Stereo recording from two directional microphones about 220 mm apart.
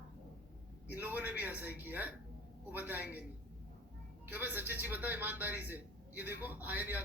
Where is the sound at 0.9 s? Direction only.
10° right (ahead or behind).